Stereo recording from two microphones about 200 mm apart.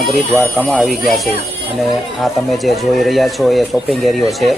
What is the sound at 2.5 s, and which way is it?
Speech, centre (ahead or behind).